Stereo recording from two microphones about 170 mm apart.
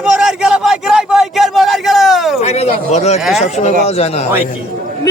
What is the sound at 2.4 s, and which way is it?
A man's voice, 40° left (ahead or behind).